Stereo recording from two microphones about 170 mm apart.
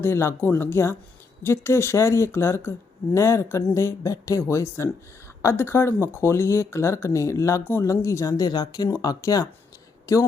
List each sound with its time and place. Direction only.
0.0 s speech: 15° left (ahead or behind)